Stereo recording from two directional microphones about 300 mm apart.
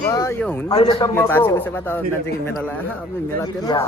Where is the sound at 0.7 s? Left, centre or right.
Centre.